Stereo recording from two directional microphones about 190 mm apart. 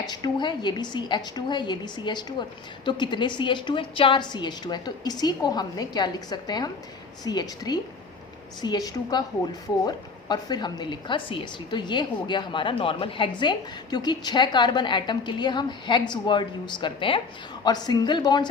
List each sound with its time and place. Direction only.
0.0 s a woman's voice: 20° left (ahead or behind)